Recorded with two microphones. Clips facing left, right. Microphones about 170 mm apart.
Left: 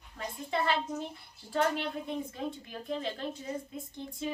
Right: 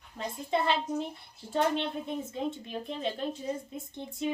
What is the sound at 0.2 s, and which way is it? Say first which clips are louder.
A child's voice: right 3 dB; 20° right (ahead or behind).